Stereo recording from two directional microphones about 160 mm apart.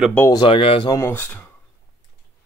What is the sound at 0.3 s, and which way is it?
Speech, 30° left (ahead or behind).